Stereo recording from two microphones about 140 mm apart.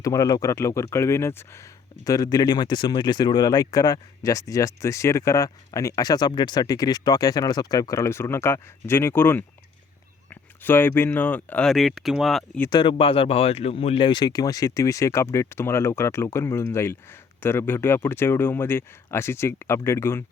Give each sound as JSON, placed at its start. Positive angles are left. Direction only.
{"t": 0.0, "sound": "speech", "side_deg": 25}
{"t": 10.6, "sound": "speech", "side_deg": 15}
{"t": 12.7, "sound": "speech", "side_deg": 35}